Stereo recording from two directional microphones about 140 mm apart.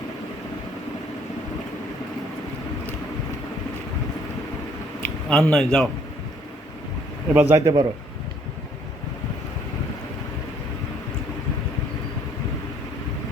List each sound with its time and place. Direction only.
5.0 s a man's voice: 5° left (ahead or behind)
7.3 s a man's voice: 20° right (ahead or behind)